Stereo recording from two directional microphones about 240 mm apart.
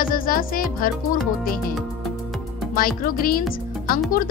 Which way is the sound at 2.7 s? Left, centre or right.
Left.